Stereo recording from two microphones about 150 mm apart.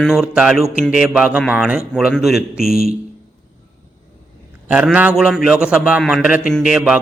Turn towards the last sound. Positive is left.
turn(degrees=-5)  # may be behind; listen again after turning